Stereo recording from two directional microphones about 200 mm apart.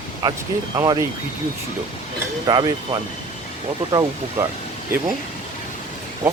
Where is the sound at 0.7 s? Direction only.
20° right (ahead or behind).